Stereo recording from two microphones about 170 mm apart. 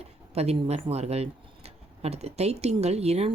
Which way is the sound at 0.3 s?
40° right (ahead or behind).